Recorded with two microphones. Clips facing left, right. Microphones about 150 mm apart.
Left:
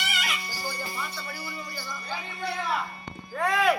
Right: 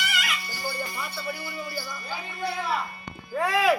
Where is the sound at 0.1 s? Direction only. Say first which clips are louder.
Right 1 dB; 30° left (ahead or behind).